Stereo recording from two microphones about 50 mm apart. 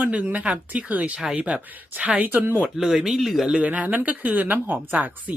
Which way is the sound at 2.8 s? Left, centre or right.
Centre.